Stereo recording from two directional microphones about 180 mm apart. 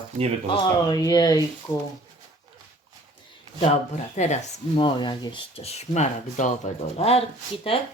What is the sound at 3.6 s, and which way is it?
Speech, 40° left (ahead or behind).